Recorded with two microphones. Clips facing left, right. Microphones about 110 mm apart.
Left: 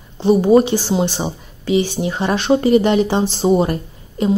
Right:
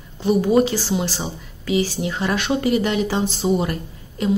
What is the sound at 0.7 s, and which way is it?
A woman's voice, 20° left (ahead or behind).